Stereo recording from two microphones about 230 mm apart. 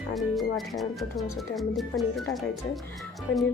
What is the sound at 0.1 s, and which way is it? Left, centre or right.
A woman's voice, centre.